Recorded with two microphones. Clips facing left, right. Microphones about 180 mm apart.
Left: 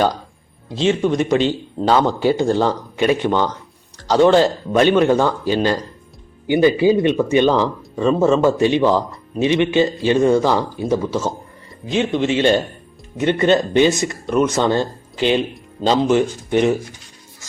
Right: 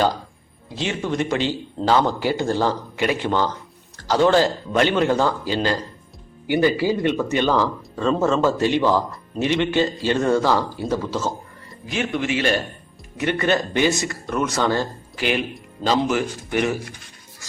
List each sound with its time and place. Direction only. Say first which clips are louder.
0.8 s speech: left 7 dB; 20° left (ahead or behind)